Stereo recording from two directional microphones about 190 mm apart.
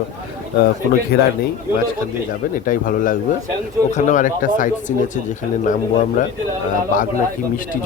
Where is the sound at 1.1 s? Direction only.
55° left (ahead or behind).